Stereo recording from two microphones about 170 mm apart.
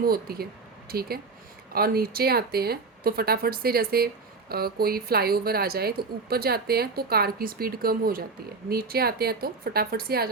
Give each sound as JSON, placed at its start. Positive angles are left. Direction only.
{"t": 0.0, "sound": "speech", "side_deg": -60}